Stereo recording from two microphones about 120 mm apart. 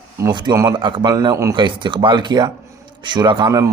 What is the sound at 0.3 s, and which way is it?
A man's voice, 35° right (ahead or behind).